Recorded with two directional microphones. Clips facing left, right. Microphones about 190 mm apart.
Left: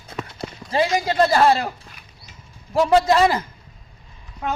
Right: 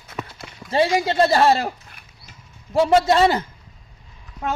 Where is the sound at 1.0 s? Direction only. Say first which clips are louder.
Even; 25° right (ahead or behind).